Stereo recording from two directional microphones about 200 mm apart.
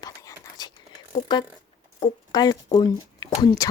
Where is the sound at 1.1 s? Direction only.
25° left (ahead or behind).